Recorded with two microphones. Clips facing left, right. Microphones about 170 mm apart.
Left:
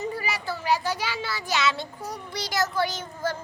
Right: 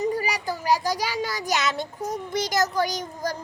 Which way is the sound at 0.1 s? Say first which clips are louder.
Right 4 dB; 40° right (ahead or behind).